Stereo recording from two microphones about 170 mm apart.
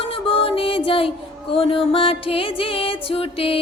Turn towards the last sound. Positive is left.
turn(degrees=35)  # may be behind; listen again after turning